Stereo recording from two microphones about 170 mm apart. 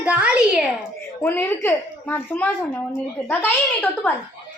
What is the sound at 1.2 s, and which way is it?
A woman's voice, 10° left (ahead or behind).